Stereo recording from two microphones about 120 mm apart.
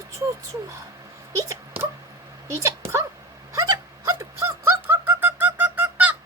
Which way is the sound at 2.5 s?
25° right (ahead or behind).